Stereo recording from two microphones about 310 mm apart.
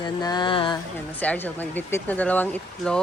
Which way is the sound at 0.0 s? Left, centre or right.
Centre.